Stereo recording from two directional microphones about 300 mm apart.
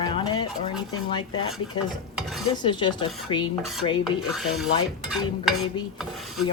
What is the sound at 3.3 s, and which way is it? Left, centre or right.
Cutlery, left.